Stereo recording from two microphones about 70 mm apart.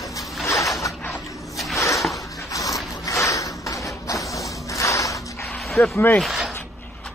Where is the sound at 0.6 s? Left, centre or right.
Centre.